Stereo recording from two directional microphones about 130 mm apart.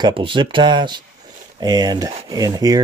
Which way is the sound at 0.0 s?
40° right (ahead or behind).